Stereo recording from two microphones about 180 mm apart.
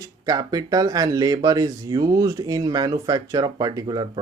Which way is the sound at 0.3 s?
20° right (ahead or behind).